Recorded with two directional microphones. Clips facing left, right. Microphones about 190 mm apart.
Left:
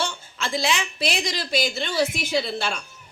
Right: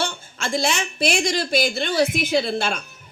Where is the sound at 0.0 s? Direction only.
50° right (ahead or behind).